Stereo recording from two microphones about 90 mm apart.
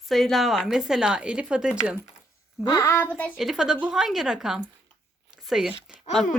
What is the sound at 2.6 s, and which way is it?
Speech, 40° left (ahead or behind).